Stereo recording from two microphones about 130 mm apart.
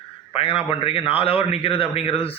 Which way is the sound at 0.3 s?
45° left (ahead or behind).